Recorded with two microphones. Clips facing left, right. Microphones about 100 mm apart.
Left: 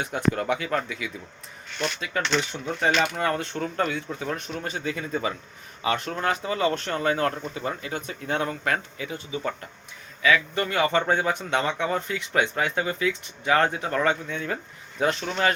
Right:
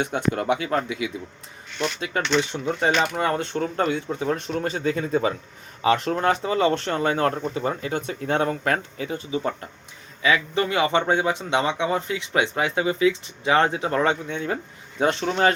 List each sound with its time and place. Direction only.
0.0 s speech: 25° right (ahead or behind)